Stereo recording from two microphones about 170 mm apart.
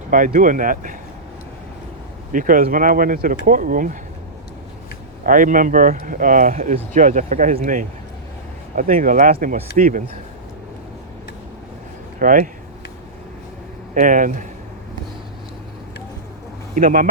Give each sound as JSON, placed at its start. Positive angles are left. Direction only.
{"t": 0.1, "sound": "speech", "side_deg": -50}
{"t": 2.3, "sound": "speech", "side_deg": -50}
{"t": 5.2, "sound": "speech", "side_deg": -50}
{"t": 12.2, "sound": "speech", "side_deg": -50}
{"t": 13.9, "sound": "speech", "side_deg": -50}
{"t": 16.7, "sound": "speech", "side_deg": -55}